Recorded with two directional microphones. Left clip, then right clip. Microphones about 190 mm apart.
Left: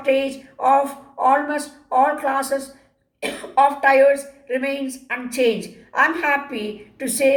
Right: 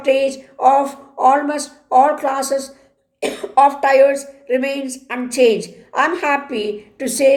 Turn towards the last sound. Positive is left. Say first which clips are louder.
# right 4 dB
turn(degrees=-50)  # may be behind; listen again after turning